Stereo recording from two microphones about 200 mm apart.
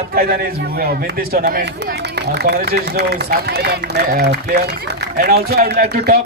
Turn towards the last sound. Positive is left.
turn(degrees=-50)  # may be behind; listen again after turning